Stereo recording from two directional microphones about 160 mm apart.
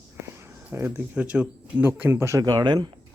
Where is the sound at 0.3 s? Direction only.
15° right (ahead or behind).